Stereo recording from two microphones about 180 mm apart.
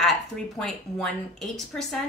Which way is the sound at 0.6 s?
5° left (ahead or behind).